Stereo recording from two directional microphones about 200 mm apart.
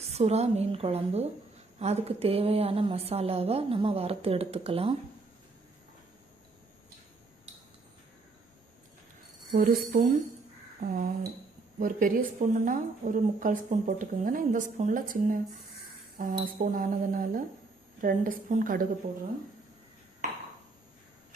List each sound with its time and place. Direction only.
0.0 s a woman's voice: 30° right (ahead or behind)
9.5 s a woman's voice: 40° right (ahead or behind)